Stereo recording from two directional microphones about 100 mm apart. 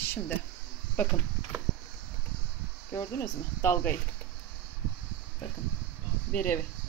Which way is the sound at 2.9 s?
25° left (ahead or behind).